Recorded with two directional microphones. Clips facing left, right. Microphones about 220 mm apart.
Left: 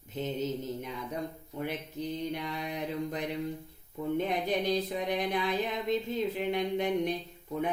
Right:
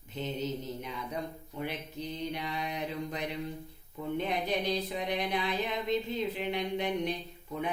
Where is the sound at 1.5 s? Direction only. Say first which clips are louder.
Left 2 dB; 45° left (ahead or behind).